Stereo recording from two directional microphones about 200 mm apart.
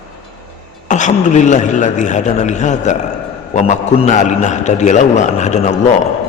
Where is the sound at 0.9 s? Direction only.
40° left (ahead or behind).